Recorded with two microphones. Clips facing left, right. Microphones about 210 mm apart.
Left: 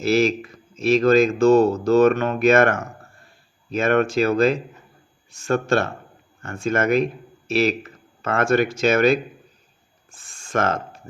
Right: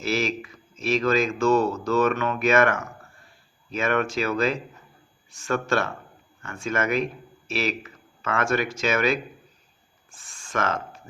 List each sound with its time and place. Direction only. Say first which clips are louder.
0.0 s a man's voice: left 7 dB; 30° left (ahead or behind)
6.4 s speech: left 5 dB; 45° left (ahead or behind)
6.9 s speech: left 6 dB; 30° left (ahead or behind)
7.8 s a sound: left 3 dB; 45° left (ahead or behind)
8.4 s speech: left 8 dB; 30° left (ahead or behind)
10.4 s speech: left 5 dB; 45° left (ahead or behind)